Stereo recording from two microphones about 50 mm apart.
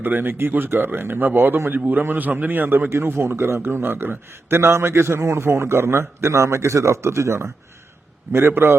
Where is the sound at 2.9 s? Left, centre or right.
Right.